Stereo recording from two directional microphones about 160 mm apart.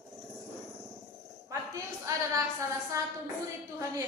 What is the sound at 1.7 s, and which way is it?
A woman's voice, 20° right (ahead or behind).